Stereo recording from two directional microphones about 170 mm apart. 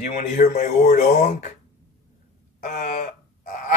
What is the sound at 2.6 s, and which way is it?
Speech, 50° left (ahead or behind).